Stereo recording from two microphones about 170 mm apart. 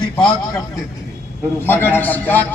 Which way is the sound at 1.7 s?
10° left (ahead or behind).